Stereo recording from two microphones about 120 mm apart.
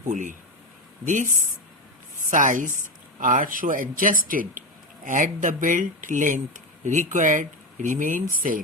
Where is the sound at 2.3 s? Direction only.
90° right.